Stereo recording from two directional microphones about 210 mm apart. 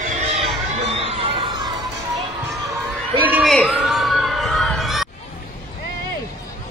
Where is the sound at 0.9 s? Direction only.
25° right (ahead or behind).